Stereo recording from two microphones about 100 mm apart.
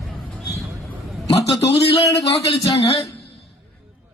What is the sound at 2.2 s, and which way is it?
Speech, 75° left (ahead or behind).